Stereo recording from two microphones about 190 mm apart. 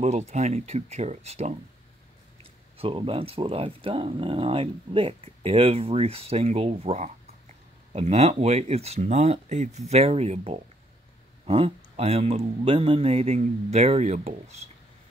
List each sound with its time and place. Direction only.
0.3 s speech: 35° right (ahead or behind)
2.8 s speech: 25° right (ahead or behind)